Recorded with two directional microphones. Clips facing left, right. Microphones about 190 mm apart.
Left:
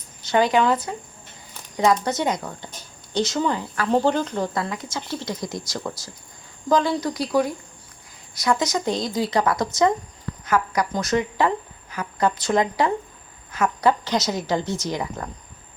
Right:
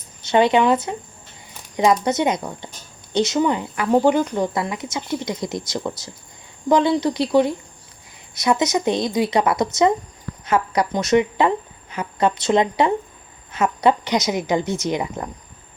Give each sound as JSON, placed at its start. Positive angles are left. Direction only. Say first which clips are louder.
{"t": 0.3, "sound": "a woman's voice", "louder": "right 3 dB", "side_deg": -20}